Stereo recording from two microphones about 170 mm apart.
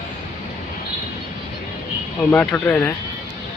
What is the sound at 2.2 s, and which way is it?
Speech, 10° left (ahead or behind).